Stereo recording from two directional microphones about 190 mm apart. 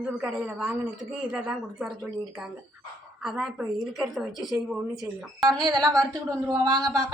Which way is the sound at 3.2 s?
Centre (ahead or behind).